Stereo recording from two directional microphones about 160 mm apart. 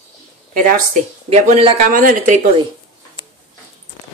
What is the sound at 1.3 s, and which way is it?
Speech, 40° right (ahead or behind).